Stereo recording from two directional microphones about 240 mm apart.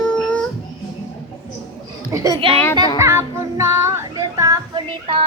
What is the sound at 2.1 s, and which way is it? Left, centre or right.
Speech, centre.